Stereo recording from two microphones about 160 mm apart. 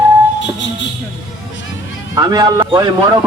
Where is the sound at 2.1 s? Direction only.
25° right (ahead or behind).